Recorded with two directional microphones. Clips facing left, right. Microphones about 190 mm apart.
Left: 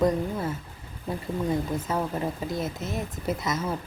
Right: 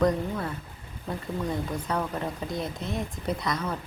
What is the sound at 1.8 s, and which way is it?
Speech, 25° left (ahead or behind).